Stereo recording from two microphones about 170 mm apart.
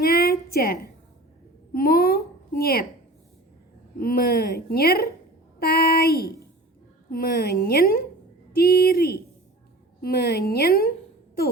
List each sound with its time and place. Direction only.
0.0 s a sound: 60° left (ahead or behind)
1.7 s a woman's voice: 60° left (ahead or behind)
4.0 s a woman's voice: 60° left (ahead or behind)